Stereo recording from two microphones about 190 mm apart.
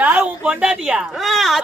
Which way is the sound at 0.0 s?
5° right (ahead or behind).